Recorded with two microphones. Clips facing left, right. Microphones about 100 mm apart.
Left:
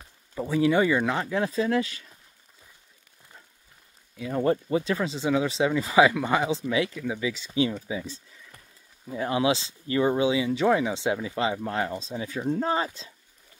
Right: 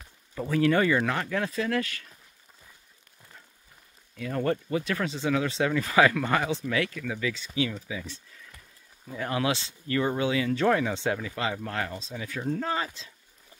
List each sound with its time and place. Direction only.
0.3 s speech: 10° left (ahead or behind)
4.2 s speech: 15° left (ahead or behind)